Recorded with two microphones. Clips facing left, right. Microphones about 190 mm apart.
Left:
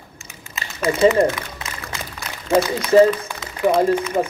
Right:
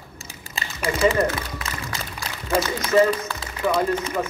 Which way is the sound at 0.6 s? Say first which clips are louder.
Right 1 dB; 30° right (ahead or behind).